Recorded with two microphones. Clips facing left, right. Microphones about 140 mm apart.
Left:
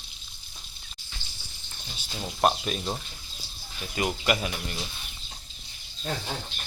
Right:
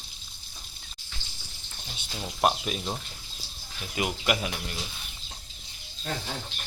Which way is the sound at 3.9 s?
5° right (ahead or behind).